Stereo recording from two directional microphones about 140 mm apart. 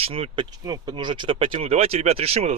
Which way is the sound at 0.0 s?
40° right (ahead or behind).